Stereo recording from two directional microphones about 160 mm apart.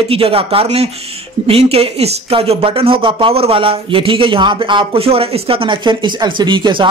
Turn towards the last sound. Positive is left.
turn(degrees=-30)  # may be behind; listen again after turning